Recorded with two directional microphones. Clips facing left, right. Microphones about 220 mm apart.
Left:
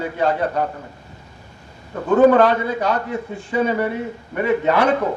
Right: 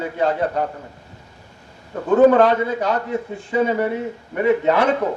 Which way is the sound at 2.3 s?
20° right (ahead or behind).